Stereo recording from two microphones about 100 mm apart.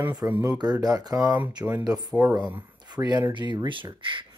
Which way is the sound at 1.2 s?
15° right (ahead or behind).